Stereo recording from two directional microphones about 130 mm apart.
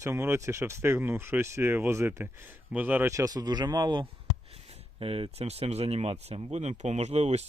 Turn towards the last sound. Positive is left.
turn(degrees=-55)  # may be behind; listen again after turning